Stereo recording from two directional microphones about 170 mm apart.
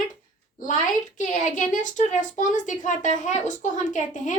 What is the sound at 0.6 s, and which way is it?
A woman's voice, 50° left (ahead or behind).